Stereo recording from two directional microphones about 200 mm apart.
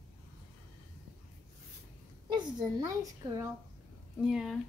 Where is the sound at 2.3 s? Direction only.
20° right (ahead or behind).